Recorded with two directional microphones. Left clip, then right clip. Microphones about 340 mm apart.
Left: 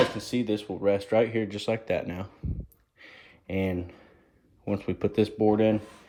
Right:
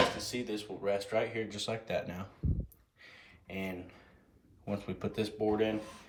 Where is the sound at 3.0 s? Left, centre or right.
Left.